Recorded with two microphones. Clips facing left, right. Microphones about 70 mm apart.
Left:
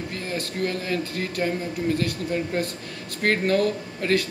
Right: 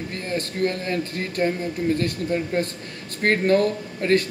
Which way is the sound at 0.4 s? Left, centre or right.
Right.